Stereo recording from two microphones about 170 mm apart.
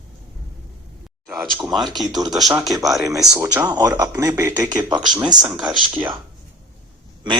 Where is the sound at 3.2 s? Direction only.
20° right (ahead or behind).